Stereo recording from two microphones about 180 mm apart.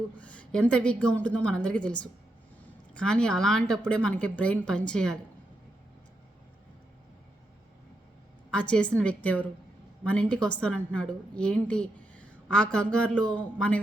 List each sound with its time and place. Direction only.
0.2 s a woman's voice: 5° left (ahead or behind)
8.4 s a woman's voice: 5° left (ahead or behind)